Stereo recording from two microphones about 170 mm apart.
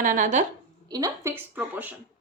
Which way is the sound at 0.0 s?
50° right (ahead or behind).